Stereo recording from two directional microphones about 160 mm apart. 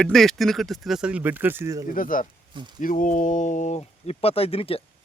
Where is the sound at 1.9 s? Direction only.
60° left (ahead or behind); by 4.8 s 35° left (ahead or behind).